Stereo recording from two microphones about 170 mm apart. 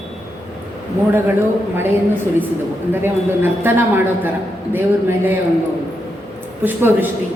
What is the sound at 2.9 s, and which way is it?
Speech, 15° right (ahead or behind).